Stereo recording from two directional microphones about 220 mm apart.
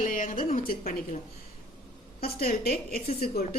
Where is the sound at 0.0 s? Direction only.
35° left (ahead or behind).